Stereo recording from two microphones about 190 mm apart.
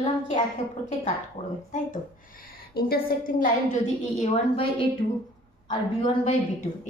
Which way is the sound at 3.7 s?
35° left (ahead or behind).